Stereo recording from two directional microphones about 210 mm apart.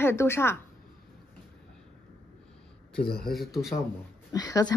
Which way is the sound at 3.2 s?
Centre (ahead or behind).